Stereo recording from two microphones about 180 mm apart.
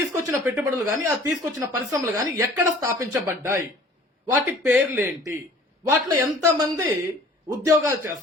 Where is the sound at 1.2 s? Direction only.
15° right (ahead or behind).